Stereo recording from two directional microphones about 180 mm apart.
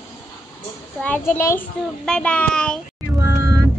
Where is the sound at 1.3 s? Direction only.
15° left (ahead or behind).